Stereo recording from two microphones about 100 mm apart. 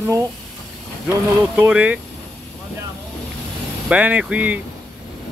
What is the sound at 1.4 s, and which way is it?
Speech, 15° right (ahead or behind).